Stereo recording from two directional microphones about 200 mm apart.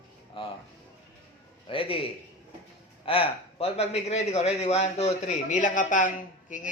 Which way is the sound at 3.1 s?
30° left (ahead or behind).